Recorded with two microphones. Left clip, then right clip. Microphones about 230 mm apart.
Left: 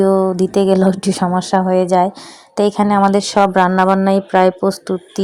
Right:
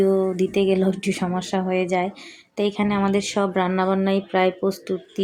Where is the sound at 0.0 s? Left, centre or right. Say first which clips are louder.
Left 6 dB; left.